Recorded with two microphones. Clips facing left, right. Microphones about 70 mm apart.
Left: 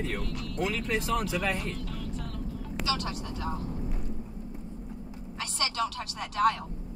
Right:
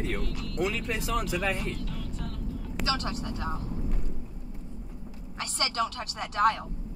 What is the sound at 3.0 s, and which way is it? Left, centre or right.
Speech, right.